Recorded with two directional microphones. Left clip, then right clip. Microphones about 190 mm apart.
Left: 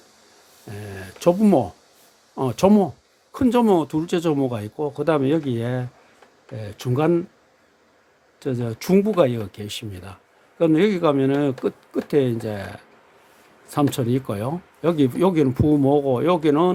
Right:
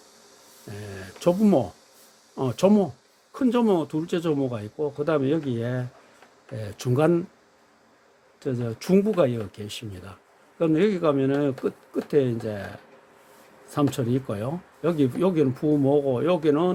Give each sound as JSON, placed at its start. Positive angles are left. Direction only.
{"t": 0.7, "sound": "speech", "side_deg": 10}
{"t": 8.4, "sound": "speech", "side_deg": 15}
{"t": 13.9, "sound": "speech", "side_deg": 15}